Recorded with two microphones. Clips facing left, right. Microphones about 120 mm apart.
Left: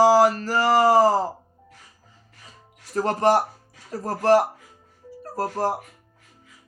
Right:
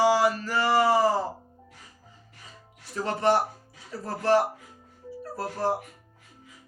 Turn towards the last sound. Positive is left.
turn(degrees=40)  # may be behind; listen again after turning